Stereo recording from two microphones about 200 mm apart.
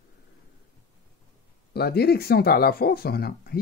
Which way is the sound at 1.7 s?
50° left (ahead or behind).